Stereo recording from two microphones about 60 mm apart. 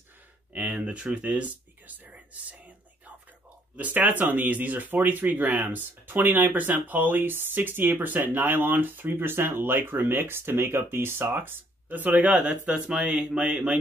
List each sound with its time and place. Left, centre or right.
0.5 s speech: right
3.7 s speech: right